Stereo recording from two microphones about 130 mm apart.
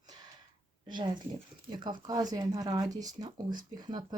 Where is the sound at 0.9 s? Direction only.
35° right (ahead or behind).